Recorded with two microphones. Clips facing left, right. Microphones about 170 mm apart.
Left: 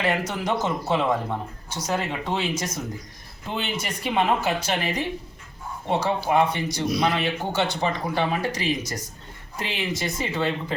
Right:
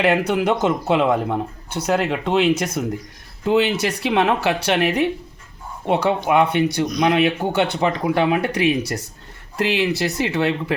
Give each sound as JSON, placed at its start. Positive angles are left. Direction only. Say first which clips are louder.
{"t": 0.0, "sound": "speech", "louder": "right 7 dB", "side_deg": -65}
{"t": 3.4, "sound": "speech", "louder": "right 12 dB", "side_deg": -75}